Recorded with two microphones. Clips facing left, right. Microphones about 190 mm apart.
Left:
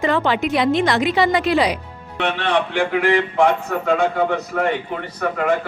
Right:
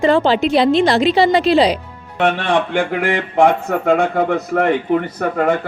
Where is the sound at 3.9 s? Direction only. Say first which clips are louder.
Right 2 dB; 55° right (ahead or behind).